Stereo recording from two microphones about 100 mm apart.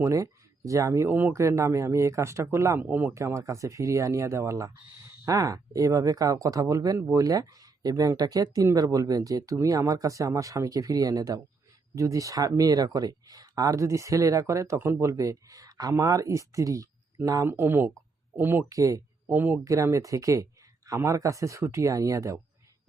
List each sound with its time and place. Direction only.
0.0 s speech: 30° right (ahead or behind)
2.9 s speech: 15° right (ahead or behind)
3.2 s speech: 30° right (ahead or behind)
18.7 s speech: 35° right (ahead or behind)
19.3 s speech: 20° right (ahead or behind)
19.6 s speech: 30° right (ahead or behind)